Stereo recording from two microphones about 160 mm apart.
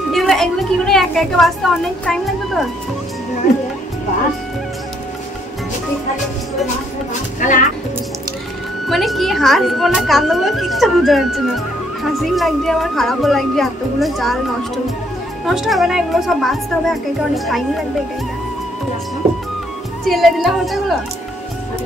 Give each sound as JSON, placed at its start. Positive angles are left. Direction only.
{"t": 0.1, "sound": "a woman's voice", "side_deg": 0}
{"t": 7.3, "sound": "music", "side_deg": 50}
{"t": 8.8, "sound": "a woman's voice", "side_deg": 0}
{"t": 15.4, "sound": "a woman's voice", "side_deg": 0}
{"t": 20.1, "sound": "a woman's voice", "side_deg": 0}